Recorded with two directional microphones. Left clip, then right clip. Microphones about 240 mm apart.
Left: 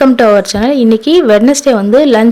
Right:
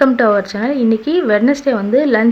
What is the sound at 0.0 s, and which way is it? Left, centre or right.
A woman's voice, left.